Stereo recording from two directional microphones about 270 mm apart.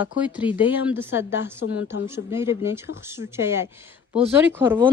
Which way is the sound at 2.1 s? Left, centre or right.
Centre.